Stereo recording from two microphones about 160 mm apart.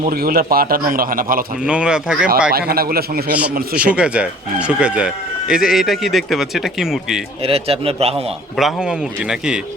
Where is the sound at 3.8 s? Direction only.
5° right (ahead or behind).